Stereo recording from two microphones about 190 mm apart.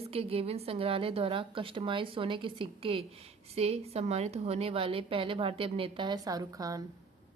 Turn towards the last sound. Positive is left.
turn(degrees=-20)  # may be behind; listen again after turning